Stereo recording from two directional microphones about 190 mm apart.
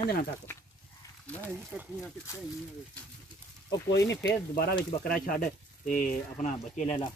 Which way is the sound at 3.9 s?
65° left (ahead or behind).